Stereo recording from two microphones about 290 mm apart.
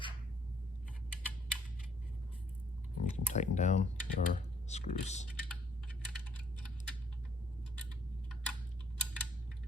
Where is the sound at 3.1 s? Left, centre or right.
Left.